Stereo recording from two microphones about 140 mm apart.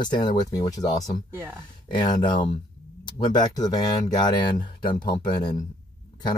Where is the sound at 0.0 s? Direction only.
30° left (ahead or behind).